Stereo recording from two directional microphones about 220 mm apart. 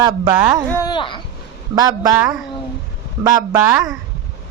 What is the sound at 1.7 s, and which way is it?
Speech, 15° right (ahead or behind).